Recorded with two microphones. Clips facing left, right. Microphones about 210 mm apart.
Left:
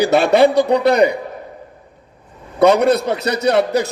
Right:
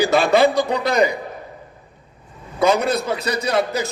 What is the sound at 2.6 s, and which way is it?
A man's voice, 65° left (ahead or behind).